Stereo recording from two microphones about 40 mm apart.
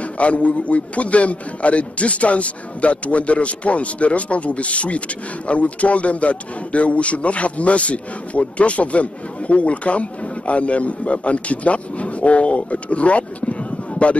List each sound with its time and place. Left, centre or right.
0.0 s speech: left